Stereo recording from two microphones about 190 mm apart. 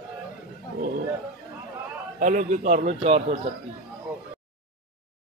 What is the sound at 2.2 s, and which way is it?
A man's voice, 40° right (ahead or behind).